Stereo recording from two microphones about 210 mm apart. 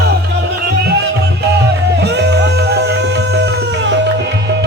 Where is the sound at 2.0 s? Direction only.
55° right (ahead or behind).